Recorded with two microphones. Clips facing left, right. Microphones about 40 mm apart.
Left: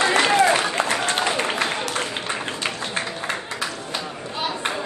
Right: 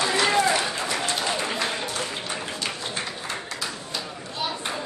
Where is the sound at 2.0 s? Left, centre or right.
Left.